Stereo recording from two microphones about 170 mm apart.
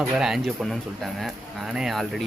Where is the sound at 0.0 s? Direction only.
Centre (ahead or behind).